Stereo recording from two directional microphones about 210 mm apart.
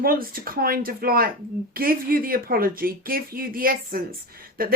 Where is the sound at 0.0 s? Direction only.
45° right (ahead or behind).